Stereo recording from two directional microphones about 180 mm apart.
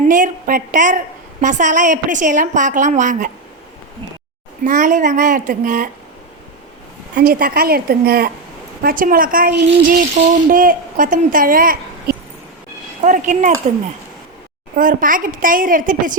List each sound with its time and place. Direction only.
0.1 s a woman's voice: 45° right (ahead or behind)
4.6 s a woman's voice: 45° right (ahead or behind)
7.2 s a woman's voice: 50° right (ahead or behind)
14.8 s a woman's voice: 50° right (ahead or behind)